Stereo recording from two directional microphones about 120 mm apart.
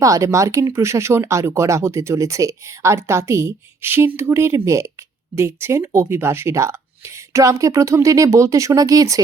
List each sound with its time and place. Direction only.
0.0 s speech: 25° right (ahead or behind)